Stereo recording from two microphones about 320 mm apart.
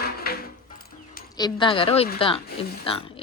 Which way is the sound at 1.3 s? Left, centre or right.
Centre.